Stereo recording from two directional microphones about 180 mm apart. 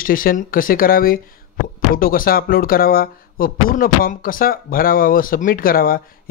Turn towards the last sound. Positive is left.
turn(degrees=55)  # may be behind; listen again after turning